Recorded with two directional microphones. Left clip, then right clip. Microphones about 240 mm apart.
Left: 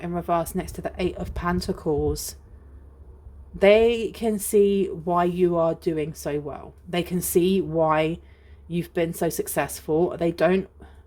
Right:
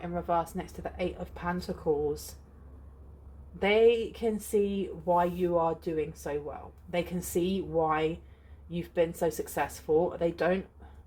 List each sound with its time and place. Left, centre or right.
0.0 s speech: left
3.6 s speech: left